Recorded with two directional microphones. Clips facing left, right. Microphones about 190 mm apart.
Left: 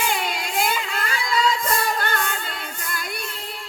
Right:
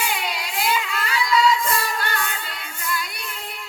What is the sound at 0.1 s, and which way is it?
Music, 50° left (ahead or behind).